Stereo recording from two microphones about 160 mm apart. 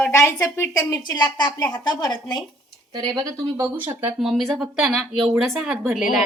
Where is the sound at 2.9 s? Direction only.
25° right (ahead or behind).